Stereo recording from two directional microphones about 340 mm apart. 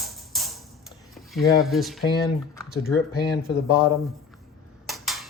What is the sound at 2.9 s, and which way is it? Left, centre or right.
Speech, left.